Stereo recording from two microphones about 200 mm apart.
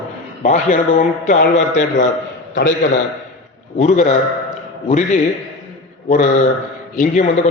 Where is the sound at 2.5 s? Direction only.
65° left (ahead or behind).